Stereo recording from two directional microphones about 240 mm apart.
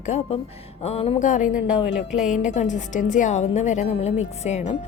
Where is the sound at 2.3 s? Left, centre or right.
Left.